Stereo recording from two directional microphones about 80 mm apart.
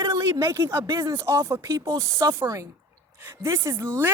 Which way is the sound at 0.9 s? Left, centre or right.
Right.